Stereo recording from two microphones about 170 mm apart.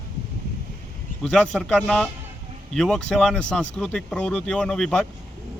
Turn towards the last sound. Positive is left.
turn(degrees=5)  # may be behind; listen again after turning